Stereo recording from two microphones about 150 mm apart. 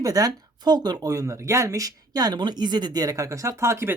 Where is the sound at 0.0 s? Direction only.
25° right (ahead or behind).